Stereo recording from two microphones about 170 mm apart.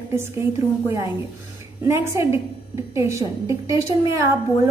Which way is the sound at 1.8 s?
15° right (ahead or behind).